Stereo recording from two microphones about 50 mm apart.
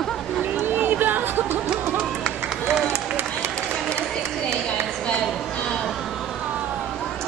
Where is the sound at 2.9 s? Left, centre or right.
Right.